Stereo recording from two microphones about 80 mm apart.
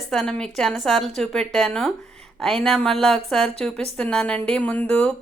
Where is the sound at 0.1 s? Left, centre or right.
Centre.